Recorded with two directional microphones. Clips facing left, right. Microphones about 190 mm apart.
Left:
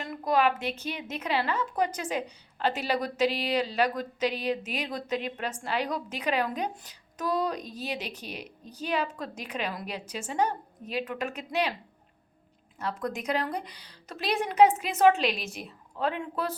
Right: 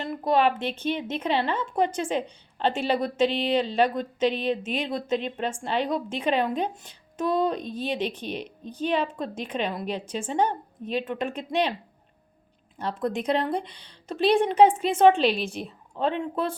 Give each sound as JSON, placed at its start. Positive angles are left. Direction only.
{"t": 0.0, "sound": "speech", "side_deg": -25}
{"t": 12.8, "sound": "speech", "side_deg": -30}